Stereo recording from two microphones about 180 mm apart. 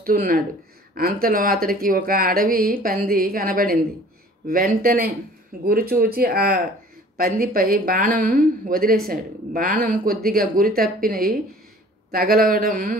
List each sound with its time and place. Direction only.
0.0 s speech: 55° right (ahead or behind)